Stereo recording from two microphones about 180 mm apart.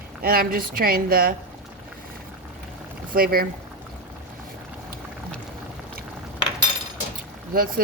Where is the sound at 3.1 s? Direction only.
55° right (ahead or behind).